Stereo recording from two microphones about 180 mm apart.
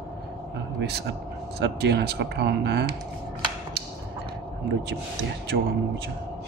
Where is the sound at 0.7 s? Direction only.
65° right (ahead or behind).